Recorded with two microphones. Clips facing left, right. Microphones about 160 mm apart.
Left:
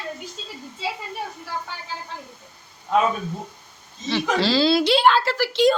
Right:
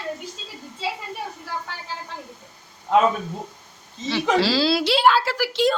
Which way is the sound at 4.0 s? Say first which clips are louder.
Even; 25° right (ahead or behind).